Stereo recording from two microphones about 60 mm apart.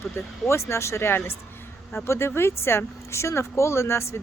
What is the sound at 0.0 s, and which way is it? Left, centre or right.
Speech, left.